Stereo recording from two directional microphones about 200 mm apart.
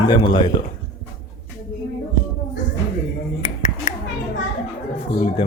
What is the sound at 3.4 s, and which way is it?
Finger snapping, 35° left (ahead or behind).